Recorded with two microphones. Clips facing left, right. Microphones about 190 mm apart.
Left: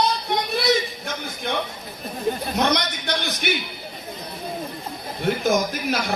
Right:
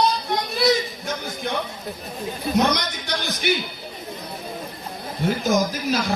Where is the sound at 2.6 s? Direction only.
60° left (ahead or behind).